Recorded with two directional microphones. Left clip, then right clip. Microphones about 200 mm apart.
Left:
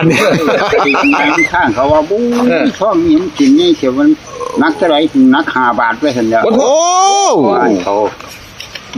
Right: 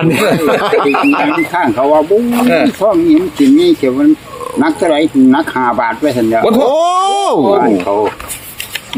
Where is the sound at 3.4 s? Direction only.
10° right (ahead or behind).